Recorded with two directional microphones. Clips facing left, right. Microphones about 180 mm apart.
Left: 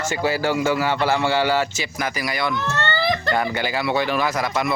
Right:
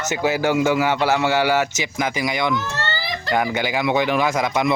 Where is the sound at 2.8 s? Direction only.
55° left (ahead or behind).